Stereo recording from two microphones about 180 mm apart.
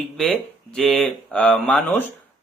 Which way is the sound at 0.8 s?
5° left (ahead or behind).